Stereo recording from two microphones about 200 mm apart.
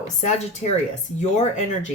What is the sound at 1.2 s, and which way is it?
Speech, 35° left (ahead or behind).